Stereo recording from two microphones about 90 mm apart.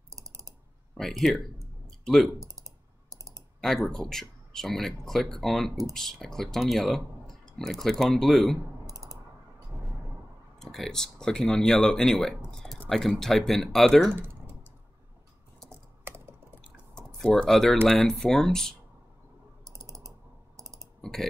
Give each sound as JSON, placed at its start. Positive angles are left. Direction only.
{"t": 0.1, "sound": "typing", "side_deg": -40}
{"t": 0.9, "sound": "speech", "side_deg": 5}
{"t": 3.6, "sound": "speech", "side_deg": 0}
{"t": 8.8, "sound": "typing", "side_deg": -40}
{"t": 10.6, "sound": "speech", "side_deg": 5}
{"t": 14.1, "sound": "typing", "side_deg": -25}
{"t": 16.9, "sound": "typing", "side_deg": 10}
{"t": 17.8, "sound": "speech", "side_deg": 5}
{"t": 19.6, "sound": "typing", "side_deg": -40}
{"t": 21.0, "sound": "typing", "side_deg": 5}